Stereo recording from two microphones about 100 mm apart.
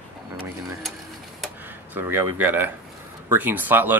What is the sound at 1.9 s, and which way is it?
Speech, 20° right (ahead or behind).